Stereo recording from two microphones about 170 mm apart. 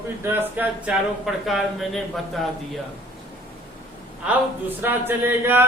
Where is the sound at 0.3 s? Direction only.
10° right (ahead or behind).